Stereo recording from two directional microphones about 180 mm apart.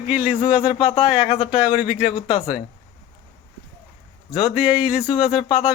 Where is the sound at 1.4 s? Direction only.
5° right (ahead or behind).